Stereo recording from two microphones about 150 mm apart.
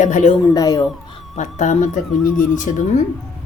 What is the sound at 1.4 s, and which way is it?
A woman's voice, 55° left (ahead or behind).